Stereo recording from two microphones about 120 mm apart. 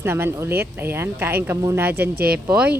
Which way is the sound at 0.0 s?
20° right (ahead or behind).